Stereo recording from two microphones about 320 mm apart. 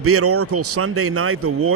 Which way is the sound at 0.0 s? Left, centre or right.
Right.